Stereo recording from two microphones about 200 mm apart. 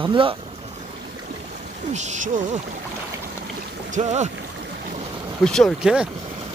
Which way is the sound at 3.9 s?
35° right (ahead or behind).